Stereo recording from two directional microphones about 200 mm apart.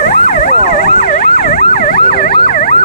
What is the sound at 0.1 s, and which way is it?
Emergency vehicle, 40° left (ahead or behind).